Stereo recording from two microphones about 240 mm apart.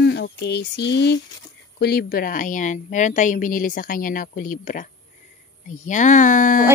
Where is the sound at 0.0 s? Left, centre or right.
Left.